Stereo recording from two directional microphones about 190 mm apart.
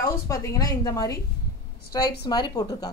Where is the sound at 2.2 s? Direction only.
20° left (ahead or behind).